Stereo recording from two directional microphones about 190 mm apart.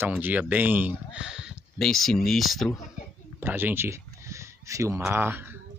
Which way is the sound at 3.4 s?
10° right (ahead or behind).